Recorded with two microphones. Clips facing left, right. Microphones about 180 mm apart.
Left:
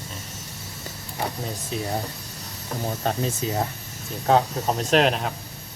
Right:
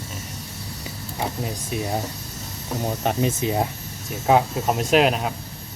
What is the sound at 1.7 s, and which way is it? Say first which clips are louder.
Speech: right 2 dB; 15° right (ahead or behind).